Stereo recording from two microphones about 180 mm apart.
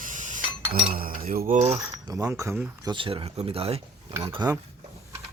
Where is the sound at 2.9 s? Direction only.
30° right (ahead or behind).